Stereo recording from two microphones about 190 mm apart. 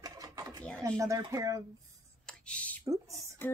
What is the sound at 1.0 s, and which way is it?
Speech, 15° right (ahead or behind).